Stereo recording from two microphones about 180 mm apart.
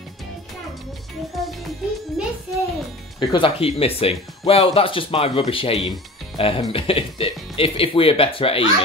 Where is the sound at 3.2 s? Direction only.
30° left (ahead or behind).